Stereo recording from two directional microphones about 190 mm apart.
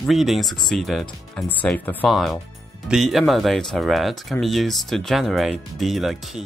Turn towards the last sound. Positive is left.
turn(degrees=0)  # may be behind; listen again after turning